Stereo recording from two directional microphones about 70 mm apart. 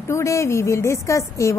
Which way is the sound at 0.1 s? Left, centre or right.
Left.